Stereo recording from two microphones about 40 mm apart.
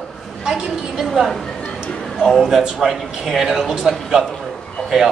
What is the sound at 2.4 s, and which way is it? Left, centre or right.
Speech, centre.